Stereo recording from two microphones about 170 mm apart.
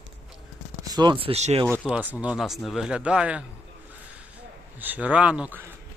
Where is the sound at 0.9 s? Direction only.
25° right (ahead or behind).